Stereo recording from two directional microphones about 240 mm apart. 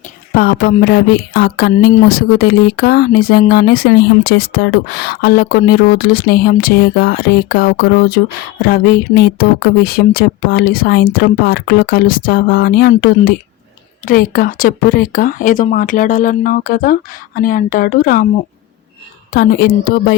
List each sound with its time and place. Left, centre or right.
0.3 s speech: left
19.3 s speech: left